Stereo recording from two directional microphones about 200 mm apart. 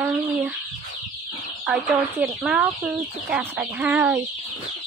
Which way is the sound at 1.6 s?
5° right (ahead or behind).